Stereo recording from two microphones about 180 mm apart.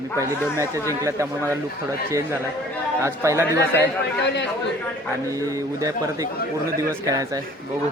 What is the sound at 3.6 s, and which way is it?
Speech, 70° left (ahead or behind).